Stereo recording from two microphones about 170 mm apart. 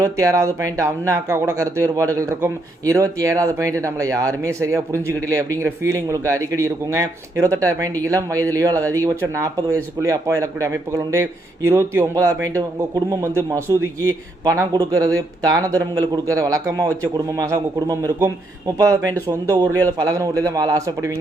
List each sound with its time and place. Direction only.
0.0 s a man's voice: 20° right (ahead or behind)